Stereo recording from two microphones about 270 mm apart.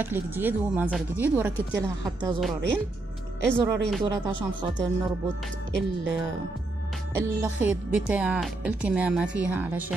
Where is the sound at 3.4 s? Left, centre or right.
Centre.